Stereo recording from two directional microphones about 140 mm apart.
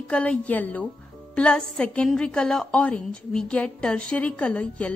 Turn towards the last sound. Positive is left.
turn(degrees=10)  # may be behind; listen again after turning